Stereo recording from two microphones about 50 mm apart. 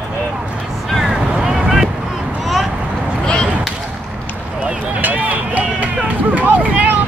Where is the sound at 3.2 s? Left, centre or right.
Centre.